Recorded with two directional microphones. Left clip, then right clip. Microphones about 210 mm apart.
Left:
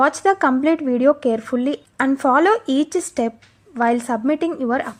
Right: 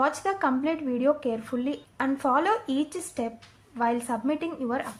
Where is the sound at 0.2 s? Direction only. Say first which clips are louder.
Left 10 dB; 40° left (ahead or behind).